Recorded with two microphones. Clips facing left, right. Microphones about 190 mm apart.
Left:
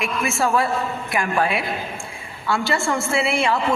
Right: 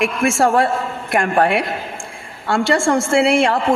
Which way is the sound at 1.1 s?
55° right (ahead or behind).